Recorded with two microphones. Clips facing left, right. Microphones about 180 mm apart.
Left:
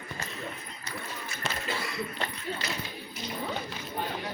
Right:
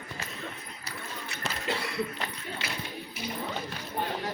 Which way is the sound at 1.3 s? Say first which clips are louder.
Right 2 dB; 65° right (ahead or behind).